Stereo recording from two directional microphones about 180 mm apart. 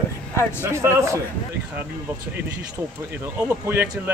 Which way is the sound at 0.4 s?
15° left (ahead or behind).